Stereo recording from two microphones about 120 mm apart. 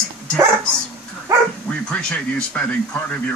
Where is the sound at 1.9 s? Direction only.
10° left (ahead or behind).